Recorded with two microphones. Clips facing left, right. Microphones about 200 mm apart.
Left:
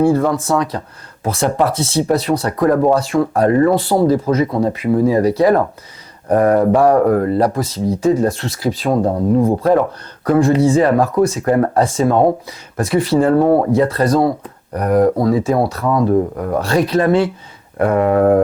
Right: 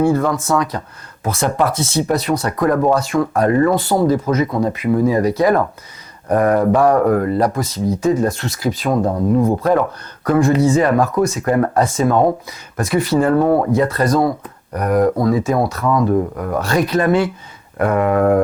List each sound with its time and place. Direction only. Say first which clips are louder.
0.0 s speech: left 2 dB; 30° left (ahead or behind)